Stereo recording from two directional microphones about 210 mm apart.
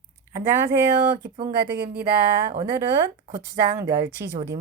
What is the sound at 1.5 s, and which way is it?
Speech, 50° right (ahead or behind).